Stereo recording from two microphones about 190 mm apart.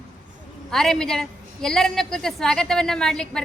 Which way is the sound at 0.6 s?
Centre (ahead or behind).